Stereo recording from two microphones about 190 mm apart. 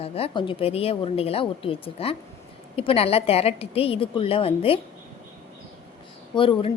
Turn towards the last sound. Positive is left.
turn(degrees=25)  # may be behind; listen again after turning